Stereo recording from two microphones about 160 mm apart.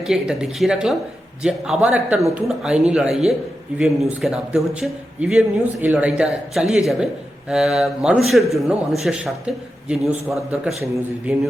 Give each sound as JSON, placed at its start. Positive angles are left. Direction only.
{"t": 0.1, "sound": "a man's voice", "side_deg": -5}